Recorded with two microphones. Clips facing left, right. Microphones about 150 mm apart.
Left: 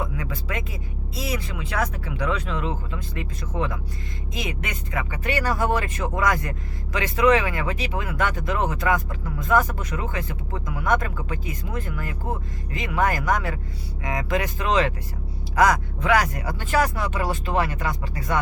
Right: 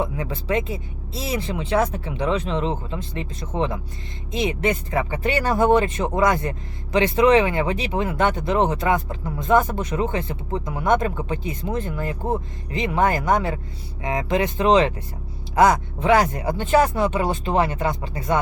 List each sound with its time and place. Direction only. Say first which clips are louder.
0.0 s speech: right 4 dB; 25° right (ahead or behind)